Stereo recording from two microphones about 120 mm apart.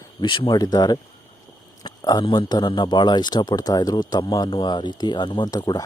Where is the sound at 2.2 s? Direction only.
40° left (ahead or behind).